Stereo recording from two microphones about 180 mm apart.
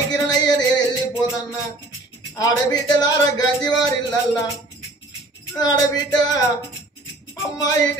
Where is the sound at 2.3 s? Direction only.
20° left (ahead or behind).